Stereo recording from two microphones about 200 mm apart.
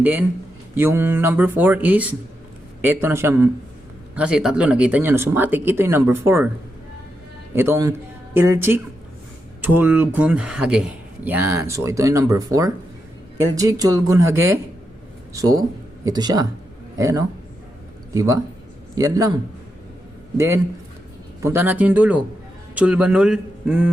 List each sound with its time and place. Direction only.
0.0 s a man's voice: 10° right (ahead or behind)
7.5 s a man's voice: 10° right (ahead or behind)